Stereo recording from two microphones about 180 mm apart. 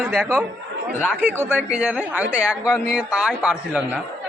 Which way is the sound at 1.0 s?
10° right (ahead or behind).